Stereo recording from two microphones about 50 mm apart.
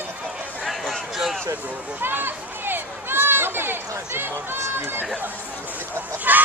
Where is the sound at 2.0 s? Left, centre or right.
Right.